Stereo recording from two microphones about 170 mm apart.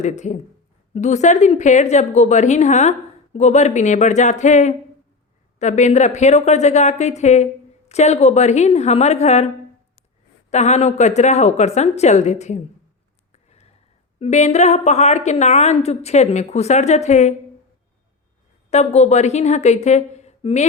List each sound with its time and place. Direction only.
0.0 s a woman's voice: 45° left (ahead or behind)
10.5 s a woman's voice: 40° left (ahead or behind)
13.3 s a sound: 40° left (ahead or behind)
14.2 s a woman's voice: 40° left (ahead or behind)
18.7 s a woman's voice: 40° left (ahead or behind)